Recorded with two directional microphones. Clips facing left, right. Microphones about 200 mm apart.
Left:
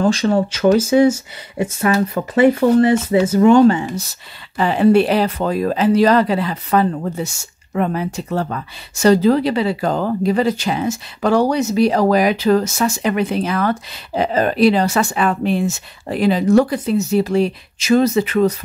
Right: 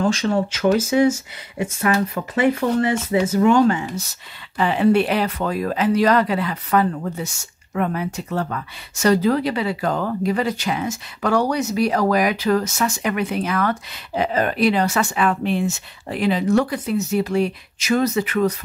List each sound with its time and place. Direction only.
0.0 s speech: 35° left (ahead or behind)